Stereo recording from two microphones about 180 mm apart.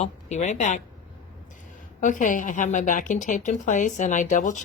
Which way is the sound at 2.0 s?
45° left (ahead or behind).